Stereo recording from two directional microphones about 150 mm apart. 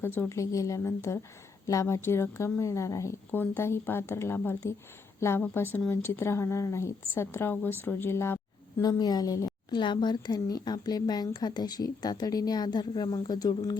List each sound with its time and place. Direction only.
0.0 s a woman's voice: 15° left (ahead or behind)